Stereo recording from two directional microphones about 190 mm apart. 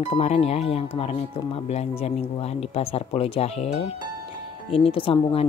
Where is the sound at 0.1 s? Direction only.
35° left (ahead or behind).